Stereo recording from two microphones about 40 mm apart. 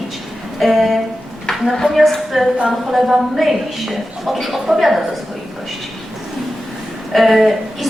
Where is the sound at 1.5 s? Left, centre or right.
Centre.